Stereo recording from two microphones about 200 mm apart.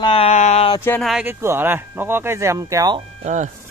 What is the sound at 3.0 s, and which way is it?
Speech, 35° right (ahead or behind).